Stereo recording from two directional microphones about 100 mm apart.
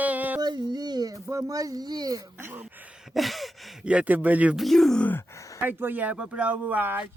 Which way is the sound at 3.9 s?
15° right (ahead or behind).